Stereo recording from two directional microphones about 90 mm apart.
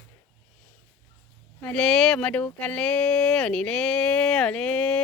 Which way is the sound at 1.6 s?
10° left (ahead or behind).